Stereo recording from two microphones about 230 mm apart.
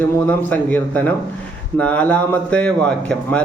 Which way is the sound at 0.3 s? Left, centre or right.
Centre.